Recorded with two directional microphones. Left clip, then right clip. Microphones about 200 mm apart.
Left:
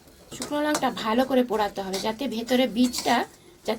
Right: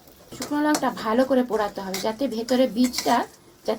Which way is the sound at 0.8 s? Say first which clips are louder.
Right 2 dB; 40° left (ahead or behind).